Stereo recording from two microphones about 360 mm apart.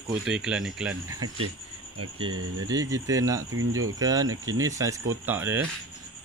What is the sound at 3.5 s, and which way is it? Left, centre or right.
Speech, right.